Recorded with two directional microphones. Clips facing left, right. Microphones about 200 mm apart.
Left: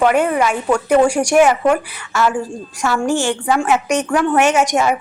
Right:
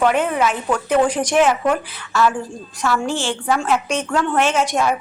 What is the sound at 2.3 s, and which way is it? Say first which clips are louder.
A woman's voice: left 4 dB; 10° left (ahead or behind).